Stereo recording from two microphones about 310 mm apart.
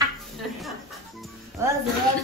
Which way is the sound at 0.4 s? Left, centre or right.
Centre.